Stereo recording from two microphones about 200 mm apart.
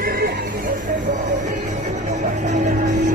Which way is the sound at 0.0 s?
45° right (ahead or behind).